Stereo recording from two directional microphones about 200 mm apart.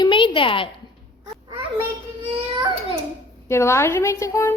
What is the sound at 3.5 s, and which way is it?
Speech, 15° left (ahead or behind).